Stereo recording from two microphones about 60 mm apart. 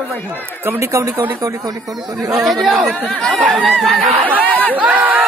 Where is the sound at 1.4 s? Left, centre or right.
Right.